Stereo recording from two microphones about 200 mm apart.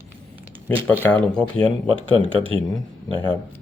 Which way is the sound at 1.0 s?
5° left (ahead or behind).